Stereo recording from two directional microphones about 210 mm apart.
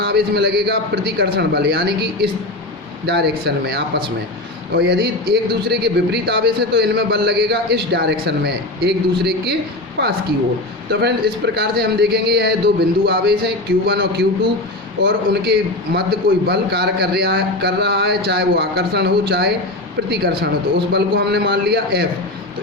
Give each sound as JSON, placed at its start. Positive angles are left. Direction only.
{"t": 0.0, "sound": "a man's voice", "side_deg": -50}
{"t": 11.0, "sound": "a man's voice", "side_deg": -50}